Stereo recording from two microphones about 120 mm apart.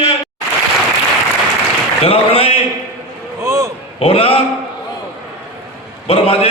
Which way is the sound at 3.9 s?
55° left (ahead or behind).